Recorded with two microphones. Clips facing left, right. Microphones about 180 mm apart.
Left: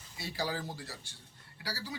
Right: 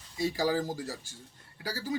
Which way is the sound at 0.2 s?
40° right (ahead or behind).